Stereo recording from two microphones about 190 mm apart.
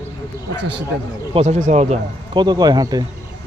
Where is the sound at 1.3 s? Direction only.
35° right (ahead or behind).